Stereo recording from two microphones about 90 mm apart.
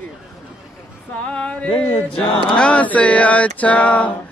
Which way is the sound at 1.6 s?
80° left.